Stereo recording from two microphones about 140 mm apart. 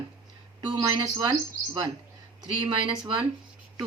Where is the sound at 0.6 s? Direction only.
30° right (ahead or behind).